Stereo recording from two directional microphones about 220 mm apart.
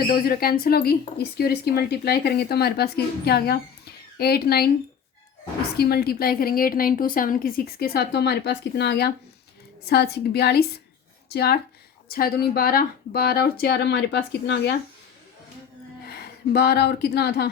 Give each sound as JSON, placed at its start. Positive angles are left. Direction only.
{"t": 0.1, "sound": "a woman's voice", "side_deg": 45}
{"t": 5.7, "sound": "a woman's voice", "side_deg": 45}
{"t": 16.0, "sound": "speech", "side_deg": 45}